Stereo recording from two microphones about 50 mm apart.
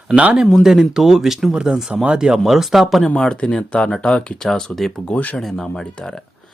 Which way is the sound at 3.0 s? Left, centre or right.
Centre.